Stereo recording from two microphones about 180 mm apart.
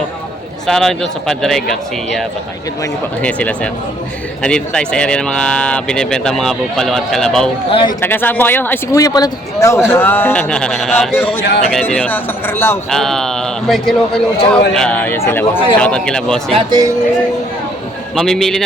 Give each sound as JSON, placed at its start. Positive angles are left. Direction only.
{"t": 0.7, "sound": "speech", "side_deg": 0}
{"t": 3.2, "sound": "a man's voice", "side_deg": 5}
{"t": 7.7, "sound": "speech", "side_deg": 30}
{"t": 8.0, "sound": "a man's voice", "side_deg": 10}
{"t": 12.9, "sound": "a man's voice", "side_deg": 0}
{"t": 16.5, "sound": "speech", "side_deg": -30}
{"t": 18.2, "sound": "speech", "side_deg": 0}